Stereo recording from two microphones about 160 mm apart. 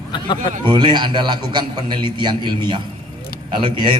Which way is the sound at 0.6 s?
30° right (ahead or behind).